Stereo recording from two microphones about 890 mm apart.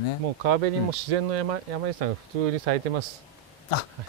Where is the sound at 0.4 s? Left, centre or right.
Right.